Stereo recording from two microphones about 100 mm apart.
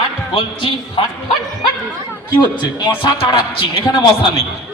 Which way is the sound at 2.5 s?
50° left (ahead or behind).